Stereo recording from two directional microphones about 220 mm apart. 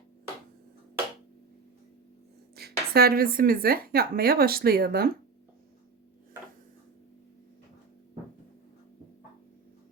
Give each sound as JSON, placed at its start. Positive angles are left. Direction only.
{"t": 2.6, "sound": "speech", "side_deg": -45}